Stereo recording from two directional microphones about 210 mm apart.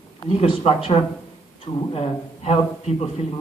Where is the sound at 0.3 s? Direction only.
30° left (ahead or behind).